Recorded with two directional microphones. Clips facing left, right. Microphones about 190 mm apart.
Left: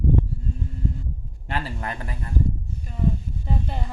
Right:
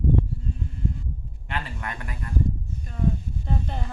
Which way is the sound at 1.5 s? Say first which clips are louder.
Left 3 dB; 35° left (ahead or behind).